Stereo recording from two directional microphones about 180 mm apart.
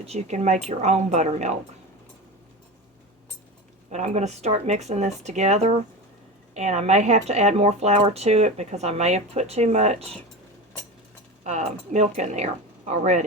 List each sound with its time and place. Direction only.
0.0 s speech: 35° right (ahead or behind)
3.8 s speech: 40° right (ahead or behind)
11.4 s speech: 40° right (ahead or behind)